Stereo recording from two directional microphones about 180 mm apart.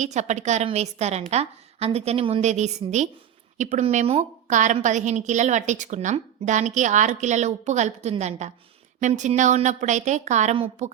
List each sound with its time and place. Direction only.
0.0 s a woman's voice: 40° right (ahead or behind)